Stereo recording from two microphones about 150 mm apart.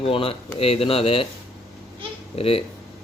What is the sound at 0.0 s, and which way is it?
Speech, 40° left (ahead or behind).